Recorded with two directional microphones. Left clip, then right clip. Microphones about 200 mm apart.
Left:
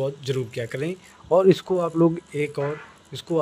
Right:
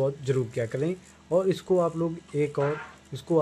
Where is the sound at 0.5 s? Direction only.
45° left (ahead or behind).